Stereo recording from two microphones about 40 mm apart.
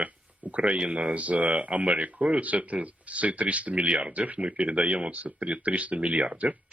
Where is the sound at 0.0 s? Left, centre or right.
Right.